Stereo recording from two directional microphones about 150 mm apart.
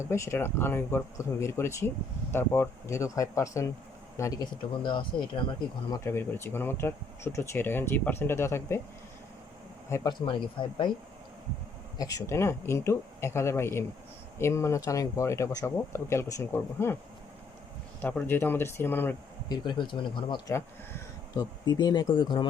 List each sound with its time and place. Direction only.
0.0 s speech: 20° left (ahead or behind)
5.9 s speech: 15° left (ahead or behind)
9.9 s speech: 25° left (ahead or behind)
11.9 s speech: 25° left (ahead or behind)
18.0 s speech: 15° left (ahead or behind)
19.5 s speech: 30° left (ahead or behind)